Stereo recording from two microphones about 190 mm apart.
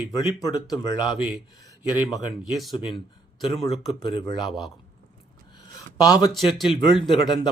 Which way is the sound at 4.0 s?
25° left (ahead or behind).